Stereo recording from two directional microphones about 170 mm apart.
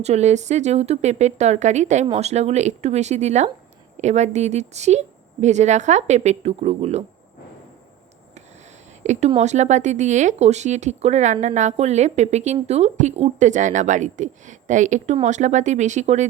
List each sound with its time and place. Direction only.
0.0 s a woman's voice: 40° right (ahead or behind)
9.0 s a woman's voice: 40° right (ahead or behind)